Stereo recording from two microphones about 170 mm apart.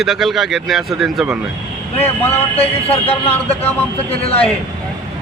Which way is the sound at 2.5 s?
35° left (ahead or behind).